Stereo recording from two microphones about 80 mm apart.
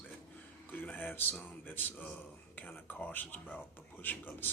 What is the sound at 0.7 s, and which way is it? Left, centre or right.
Speech, left.